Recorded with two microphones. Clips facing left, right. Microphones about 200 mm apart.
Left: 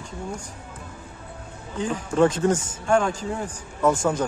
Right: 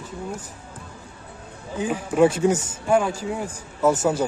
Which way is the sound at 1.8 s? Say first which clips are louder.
Right 2 dB; 10° right (ahead or behind).